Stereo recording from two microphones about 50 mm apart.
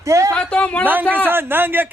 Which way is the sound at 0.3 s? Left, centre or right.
Left.